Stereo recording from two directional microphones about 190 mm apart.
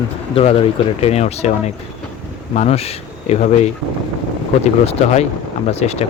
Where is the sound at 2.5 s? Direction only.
35° left (ahead or behind).